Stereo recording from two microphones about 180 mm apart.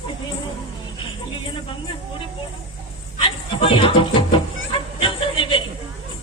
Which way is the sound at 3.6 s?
30° left (ahead or behind).